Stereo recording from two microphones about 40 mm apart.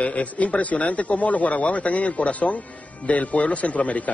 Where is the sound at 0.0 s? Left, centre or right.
Left.